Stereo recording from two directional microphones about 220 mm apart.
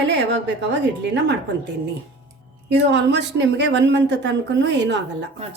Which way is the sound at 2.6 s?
50° right (ahead or behind).